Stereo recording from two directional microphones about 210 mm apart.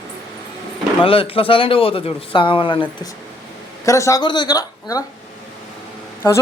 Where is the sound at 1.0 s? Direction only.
25° left (ahead or behind).